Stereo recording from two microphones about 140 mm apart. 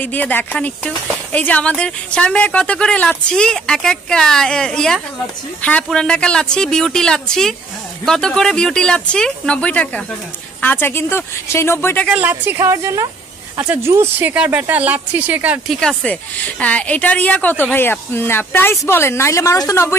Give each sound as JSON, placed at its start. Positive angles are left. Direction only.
{"t": 0.0, "sound": "speech", "side_deg": 15}
{"t": 12.1, "sound": "a woman's voice", "side_deg": -10}
{"t": 15.7, "sound": "speech", "side_deg": 0}